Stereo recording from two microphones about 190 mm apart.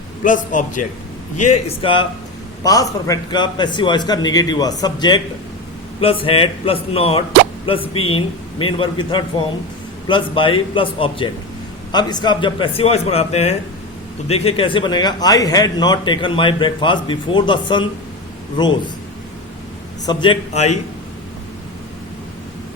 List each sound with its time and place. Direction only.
0.3 s a man's voice: 45° left (ahead or behind); by 18.9 s 25° left (ahead or behind)
20.1 s a man's voice: 25° left (ahead or behind)